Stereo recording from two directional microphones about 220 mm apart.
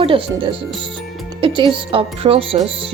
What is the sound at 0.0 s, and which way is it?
Speech, 25° right (ahead or behind).